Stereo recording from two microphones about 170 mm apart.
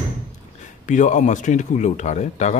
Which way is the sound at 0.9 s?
45° left (ahead or behind).